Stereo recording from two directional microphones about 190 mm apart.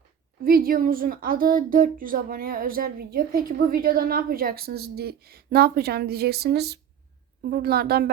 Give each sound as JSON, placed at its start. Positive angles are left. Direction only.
{"t": 0.4, "sound": "a woman's voice", "side_deg": -50}